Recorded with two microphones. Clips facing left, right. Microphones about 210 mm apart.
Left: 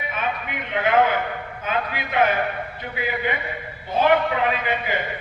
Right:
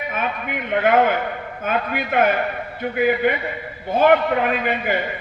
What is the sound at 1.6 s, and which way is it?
A man's voice, 50° right (ahead or behind).